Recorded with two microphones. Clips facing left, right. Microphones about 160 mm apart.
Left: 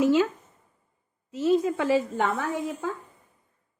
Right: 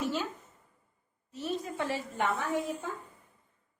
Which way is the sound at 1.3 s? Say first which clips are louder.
Left 13 dB; 90° left.